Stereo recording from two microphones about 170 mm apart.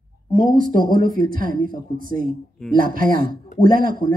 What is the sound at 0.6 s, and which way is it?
A man's voice, 55° right (ahead or behind).